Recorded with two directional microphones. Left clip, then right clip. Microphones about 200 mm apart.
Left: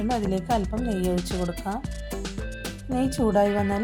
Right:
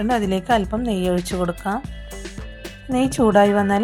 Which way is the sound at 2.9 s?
20° right (ahead or behind).